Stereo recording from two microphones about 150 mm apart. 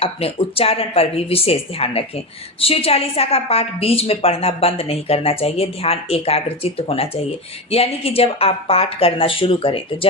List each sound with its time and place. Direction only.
0.0 s speech: 40° left (ahead or behind)